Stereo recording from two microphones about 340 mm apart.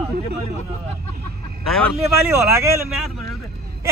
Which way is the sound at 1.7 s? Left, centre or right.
Centre.